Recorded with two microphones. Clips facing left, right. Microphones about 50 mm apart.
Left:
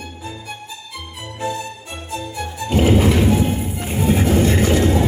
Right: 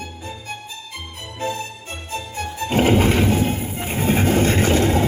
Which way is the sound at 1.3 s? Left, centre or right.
Right.